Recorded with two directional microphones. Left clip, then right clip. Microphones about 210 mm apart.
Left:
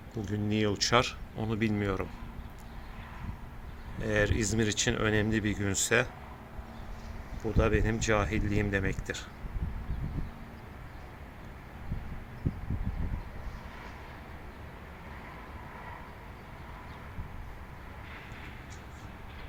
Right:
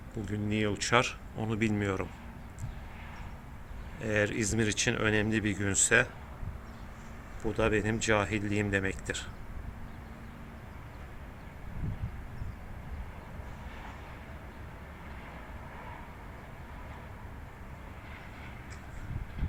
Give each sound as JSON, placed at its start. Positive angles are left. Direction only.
{"t": 0.2, "sound": "speech", "side_deg": 25}
{"t": 4.0, "sound": "speech", "side_deg": 20}
{"t": 7.4, "sound": "speech", "side_deg": 15}